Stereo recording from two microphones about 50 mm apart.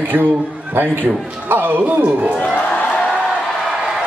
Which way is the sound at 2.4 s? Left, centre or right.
Left.